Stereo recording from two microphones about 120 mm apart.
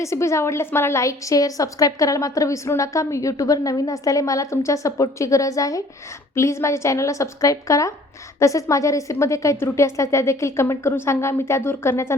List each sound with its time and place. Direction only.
0.0 s a woman's voice: 25° left (ahead or behind)